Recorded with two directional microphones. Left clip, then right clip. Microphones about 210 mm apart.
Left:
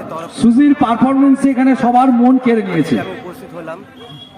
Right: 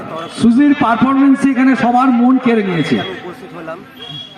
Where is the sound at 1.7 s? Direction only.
15° left (ahead or behind).